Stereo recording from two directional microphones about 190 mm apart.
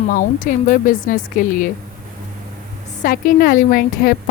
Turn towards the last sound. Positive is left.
turn(degrees=50)  # may be behind; listen again after turning